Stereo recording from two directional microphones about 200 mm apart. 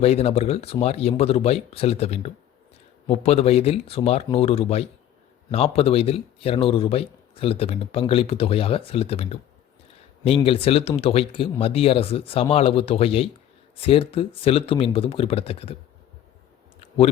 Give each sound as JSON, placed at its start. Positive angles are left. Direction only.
{"t": 0.0, "sound": "speech", "side_deg": 30}